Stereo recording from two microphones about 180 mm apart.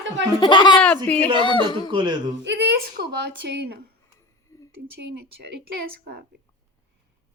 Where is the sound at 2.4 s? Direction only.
75° right (ahead or behind); by 3.8 s 60° right (ahead or behind).